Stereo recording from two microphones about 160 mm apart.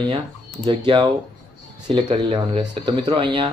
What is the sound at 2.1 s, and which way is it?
Speech, 35° right (ahead or behind).